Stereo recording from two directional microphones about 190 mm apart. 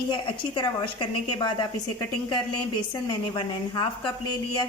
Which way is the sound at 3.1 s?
25° left (ahead or behind).